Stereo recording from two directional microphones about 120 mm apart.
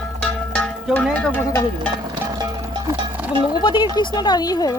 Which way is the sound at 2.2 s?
30° right (ahead or behind).